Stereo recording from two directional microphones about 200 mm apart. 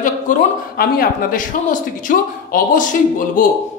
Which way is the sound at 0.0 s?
45° left (ahead or behind).